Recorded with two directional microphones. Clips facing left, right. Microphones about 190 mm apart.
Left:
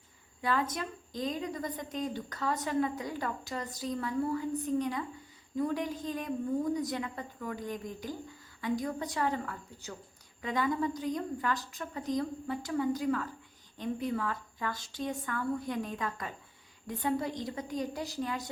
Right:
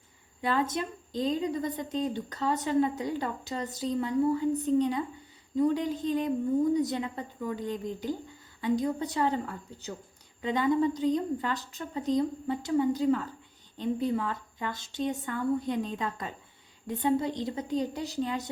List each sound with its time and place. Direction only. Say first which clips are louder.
0.4 s a woman's voice: right 3 dB; 25° right (ahead or behind)